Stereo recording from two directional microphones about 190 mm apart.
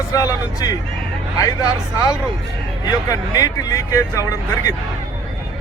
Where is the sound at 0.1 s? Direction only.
20° left (ahead or behind).